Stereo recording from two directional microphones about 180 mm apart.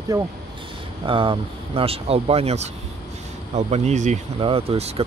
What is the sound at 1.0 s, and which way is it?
Speech, 30° right (ahead or behind).